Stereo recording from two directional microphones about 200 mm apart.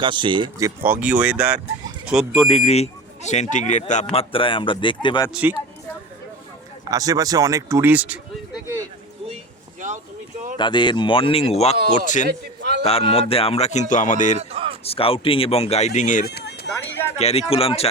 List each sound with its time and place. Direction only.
0.0 s speech: 25° right (ahead or behind)
0.9 s speech: 5° right (ahead or behind)
2.5 s speech: 30° left (ahead or behind)
5.3 s speech: 5° right (ahead or behind)
6.9 s speech: 15° right (ahead or behind)
10.6 s speech: 25° left (ahead or behind)
12.3 s a sound: 55° right (ahead or behind)
12.8 s speech: 30° left (ahead or behind)
14.3 s a sound: 30° right (ahead or behind)
14.8 s speech: 30° left (ahead or behind); by 17.0 s 60° left (ahead or behind)
17.2 s speech: 30° left (ahead or behind)